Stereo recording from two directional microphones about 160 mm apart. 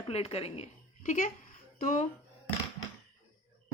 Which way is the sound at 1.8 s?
55° left (ahead or behind).